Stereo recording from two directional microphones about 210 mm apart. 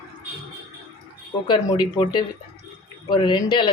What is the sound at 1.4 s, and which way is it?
Speech, 20° left (ahead or behind).